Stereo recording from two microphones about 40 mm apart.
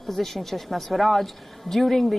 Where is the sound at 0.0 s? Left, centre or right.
Centre.